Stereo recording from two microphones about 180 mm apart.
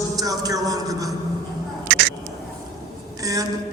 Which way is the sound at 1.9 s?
65° right (ahead or behind).